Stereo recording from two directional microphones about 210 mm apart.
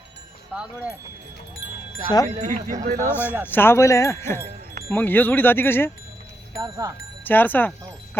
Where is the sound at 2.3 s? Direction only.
35° right (ahead or behind).